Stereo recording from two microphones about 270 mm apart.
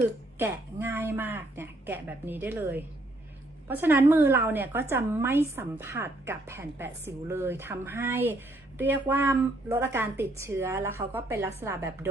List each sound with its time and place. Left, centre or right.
0.3 s a woman's voice: centre